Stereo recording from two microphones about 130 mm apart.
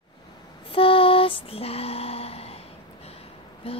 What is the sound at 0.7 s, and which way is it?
Lullaby, 45° left (ahead or behind).